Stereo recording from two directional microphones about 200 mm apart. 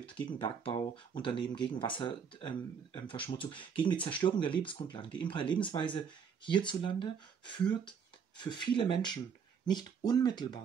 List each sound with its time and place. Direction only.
0.0 s speech: 25° left (ahead or behind)